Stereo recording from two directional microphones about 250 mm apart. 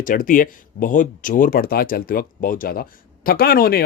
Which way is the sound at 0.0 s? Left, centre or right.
Left.